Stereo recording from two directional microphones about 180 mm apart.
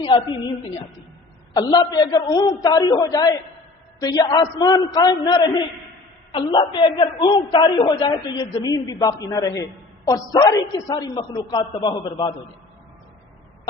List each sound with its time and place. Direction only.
0.0 s a woman's voice: 25° left (ahead or behind)
1.5 s a woman's voice: 20° left (ahead or behind)